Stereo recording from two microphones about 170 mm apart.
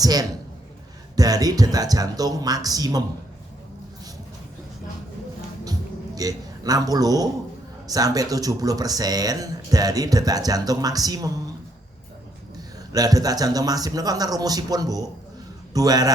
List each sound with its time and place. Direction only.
0.0 s speech: 20° right (ahead or behind)
6.1 s a man's voice: 20° right (ahead or behind)
12.9 s speech: 20° right (ahead or behind)